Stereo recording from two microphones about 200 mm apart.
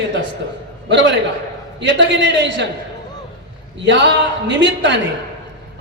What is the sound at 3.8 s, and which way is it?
Speech, 65° right (ahead or behind).